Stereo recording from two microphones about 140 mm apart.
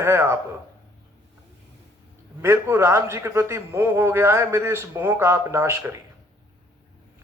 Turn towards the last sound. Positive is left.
turn(degrees=-20)  # may be behind; listen again after turning